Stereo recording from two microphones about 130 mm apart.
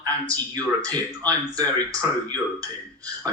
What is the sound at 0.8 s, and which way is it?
Speech, 30° right (ahead or behind).